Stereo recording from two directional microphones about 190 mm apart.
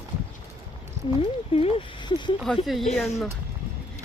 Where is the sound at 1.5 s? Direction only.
30° left (ahead or behind).